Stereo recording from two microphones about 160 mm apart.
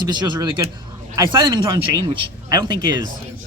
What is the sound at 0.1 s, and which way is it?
A man's voice, 25° right (ahead or behind).